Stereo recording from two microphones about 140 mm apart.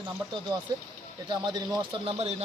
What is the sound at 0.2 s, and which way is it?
Speech, 20° right (ahead or behind).